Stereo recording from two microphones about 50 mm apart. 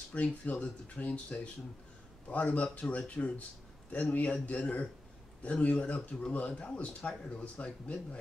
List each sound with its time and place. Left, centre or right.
0.1 s speech: left
2.2 s speech: left